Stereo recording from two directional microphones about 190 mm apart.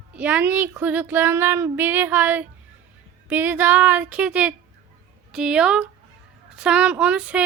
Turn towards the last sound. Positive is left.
turn(degrees=-5)  # may be behind; listen again after turning